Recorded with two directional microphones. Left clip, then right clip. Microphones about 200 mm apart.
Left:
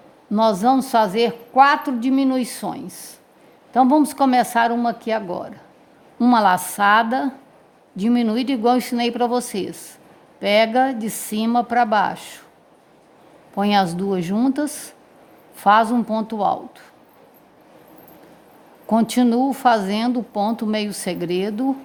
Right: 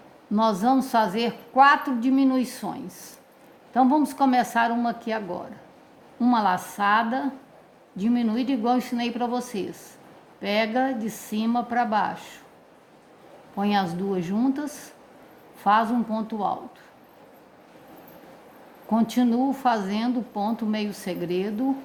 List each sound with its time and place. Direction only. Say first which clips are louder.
0.3 s a woman's voice: left 5 dB; 40° left (ahead or behind)
13.6 s a woman's voice: left 6 dB; 50° left (ahead or behind)
18.9 s a woman's voice: left 6 dB; 50° left (ahead or behind)